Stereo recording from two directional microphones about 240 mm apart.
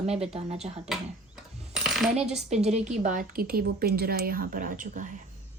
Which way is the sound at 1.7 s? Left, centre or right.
Centre.